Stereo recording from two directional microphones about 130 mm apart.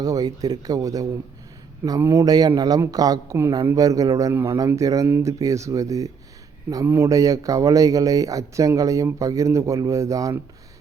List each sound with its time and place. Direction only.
0.0 s speech: 30° right (ahead or behind)